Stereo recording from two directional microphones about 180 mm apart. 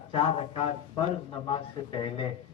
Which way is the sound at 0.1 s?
30° left (ahead or behind).